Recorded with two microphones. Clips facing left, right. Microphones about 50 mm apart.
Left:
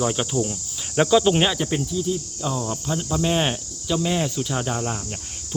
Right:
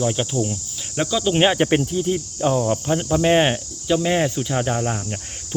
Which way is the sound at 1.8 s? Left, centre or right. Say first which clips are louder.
Right 3 dB; right.